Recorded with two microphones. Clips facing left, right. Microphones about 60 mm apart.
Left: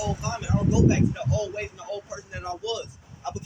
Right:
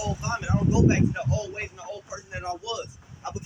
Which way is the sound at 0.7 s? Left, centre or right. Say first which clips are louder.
Even; right.